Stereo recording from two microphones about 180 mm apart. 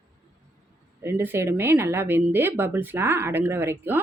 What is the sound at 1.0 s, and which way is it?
Speech, 15° right (ahead or behind).